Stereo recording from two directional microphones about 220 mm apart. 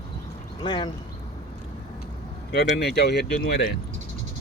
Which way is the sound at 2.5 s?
45° left (ahead or behind).